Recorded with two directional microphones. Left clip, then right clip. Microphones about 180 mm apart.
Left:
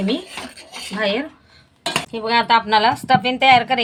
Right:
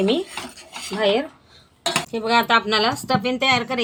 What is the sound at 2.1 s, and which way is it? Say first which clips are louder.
Speech: left 1 dB; 15° left (ahead or behind).